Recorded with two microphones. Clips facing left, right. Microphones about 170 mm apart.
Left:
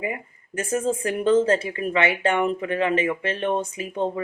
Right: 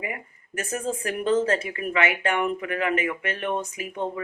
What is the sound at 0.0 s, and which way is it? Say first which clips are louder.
Speech: left 4 dB; 25° left (ahead or behind).